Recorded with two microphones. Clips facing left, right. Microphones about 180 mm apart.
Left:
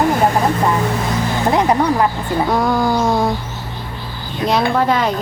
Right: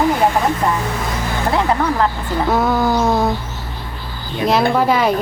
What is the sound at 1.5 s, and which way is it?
Music, 15° left (ahead or behind).